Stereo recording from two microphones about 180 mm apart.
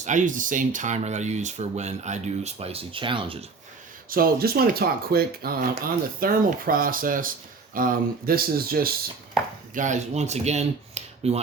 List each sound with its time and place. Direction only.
0.0 s speech: 45° right (ahead or behind); by 3.3 s 30° right (ahead or behind)
4.1 s speech: 55° right (ahead or behind)
9.7 s speech: 45° right (ahead or behind)